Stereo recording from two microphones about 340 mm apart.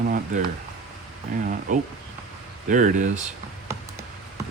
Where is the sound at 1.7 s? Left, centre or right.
Right.